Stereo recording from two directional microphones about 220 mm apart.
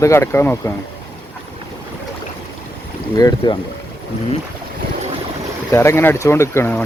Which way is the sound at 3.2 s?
15° left (ahead or behind).